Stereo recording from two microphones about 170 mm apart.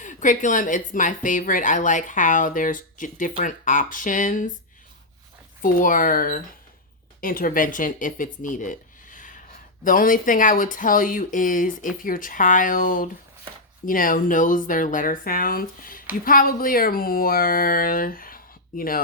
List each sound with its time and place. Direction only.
0.0 s speech: 50° left (ahead or behind)
5.6 s speech: 50° left (ahead or behind)